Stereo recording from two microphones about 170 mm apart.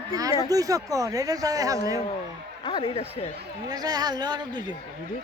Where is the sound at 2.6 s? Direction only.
30° left (ahead or behind).